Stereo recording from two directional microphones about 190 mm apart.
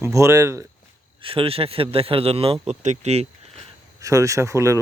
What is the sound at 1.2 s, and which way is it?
A man's voice, 30° right (ahead or behind).